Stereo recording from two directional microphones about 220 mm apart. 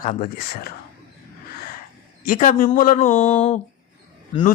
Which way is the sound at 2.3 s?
35° left (ahead or behind).